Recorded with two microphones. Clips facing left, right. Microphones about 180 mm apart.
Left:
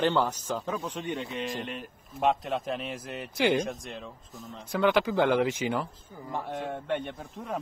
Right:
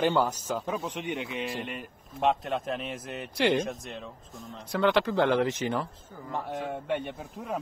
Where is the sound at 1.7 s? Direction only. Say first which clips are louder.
Even; centre (ahead or behind).